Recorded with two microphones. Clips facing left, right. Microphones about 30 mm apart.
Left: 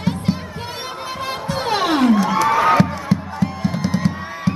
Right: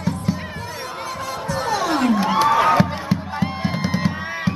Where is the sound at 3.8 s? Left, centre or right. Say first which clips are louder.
Left 2 dB; centre.